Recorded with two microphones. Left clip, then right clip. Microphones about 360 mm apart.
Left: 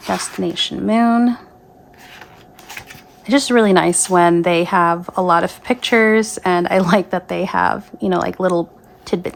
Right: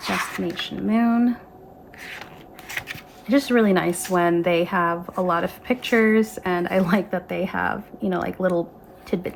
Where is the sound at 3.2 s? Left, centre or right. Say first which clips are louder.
Left 6 dB; centre.